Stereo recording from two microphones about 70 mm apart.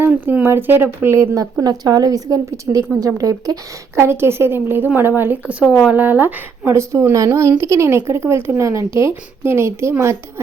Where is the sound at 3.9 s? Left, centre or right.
Right.